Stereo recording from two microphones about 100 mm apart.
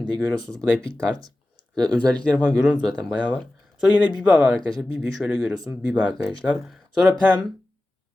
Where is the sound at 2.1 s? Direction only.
10° left (ahead or behind).